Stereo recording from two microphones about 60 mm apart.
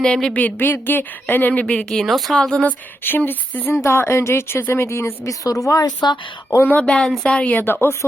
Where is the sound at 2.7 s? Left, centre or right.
Left.